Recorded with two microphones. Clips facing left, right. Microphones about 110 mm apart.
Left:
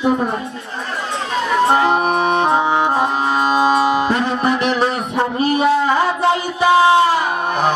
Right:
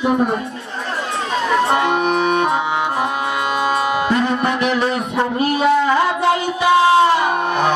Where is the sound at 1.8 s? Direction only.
35° left (ahead or behind).